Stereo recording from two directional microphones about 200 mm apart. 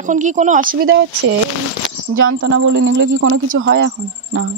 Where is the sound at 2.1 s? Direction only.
90° right; by 3.9 s 70° right (ahead or behind).